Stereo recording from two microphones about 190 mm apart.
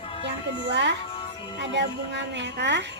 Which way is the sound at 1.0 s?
25° left (ahead or behind).